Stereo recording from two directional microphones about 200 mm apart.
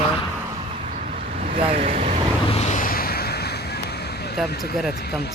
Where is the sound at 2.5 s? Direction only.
35° left (ahead or behind); by 4.4 s 55° left (ahead or behind).